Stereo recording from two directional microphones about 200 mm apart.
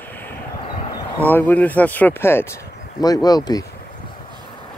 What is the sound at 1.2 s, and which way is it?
Speech, 10° left (ahead or behind).